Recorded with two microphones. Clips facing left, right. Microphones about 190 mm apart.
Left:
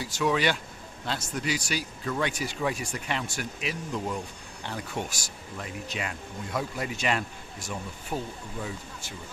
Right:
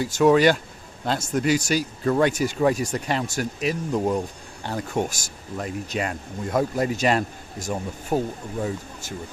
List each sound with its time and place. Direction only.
0.0 s speech: 50° right (ahead or behind)